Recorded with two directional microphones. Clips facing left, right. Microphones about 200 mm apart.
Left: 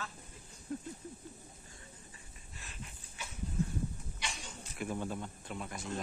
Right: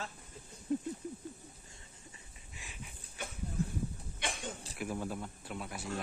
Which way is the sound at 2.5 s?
10° right (ahead or behind).